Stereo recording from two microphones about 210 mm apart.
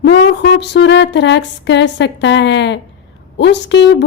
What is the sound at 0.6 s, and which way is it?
A woman's voice, 55° left (ahead or behind).